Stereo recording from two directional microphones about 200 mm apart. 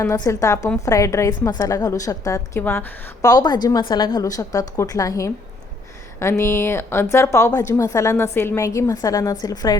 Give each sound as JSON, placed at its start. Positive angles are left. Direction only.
{"t": 0.0, "sound": "a woman's voice", "side_deg": 15}